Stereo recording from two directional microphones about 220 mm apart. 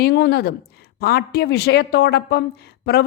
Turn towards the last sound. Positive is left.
turn(degrees=45)  # may be behind; listen again after turning